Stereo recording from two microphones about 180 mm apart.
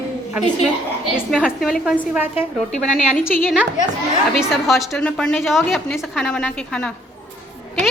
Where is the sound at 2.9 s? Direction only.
40° left (ahead or behind).